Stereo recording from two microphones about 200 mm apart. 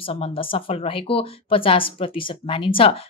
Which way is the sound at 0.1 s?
25° left (ahead or behind).